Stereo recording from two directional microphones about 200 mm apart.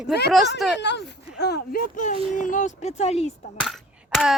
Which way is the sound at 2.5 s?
40° left (ahead or behind).